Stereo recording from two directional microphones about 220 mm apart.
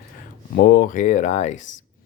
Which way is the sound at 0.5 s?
45° left (ahead or behind).